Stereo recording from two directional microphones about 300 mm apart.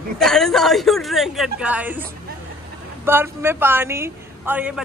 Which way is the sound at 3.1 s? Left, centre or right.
Centre.